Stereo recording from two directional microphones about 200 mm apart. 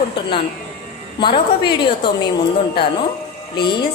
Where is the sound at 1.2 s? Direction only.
25° left (ahead or behind).